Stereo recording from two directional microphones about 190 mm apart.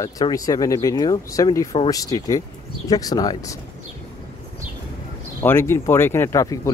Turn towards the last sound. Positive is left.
turn(degrees=15)  # may be behind; listen again after turning